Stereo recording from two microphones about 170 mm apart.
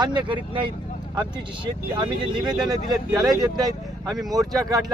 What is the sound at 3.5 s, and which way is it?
Speech, 20° right (ahead or behind).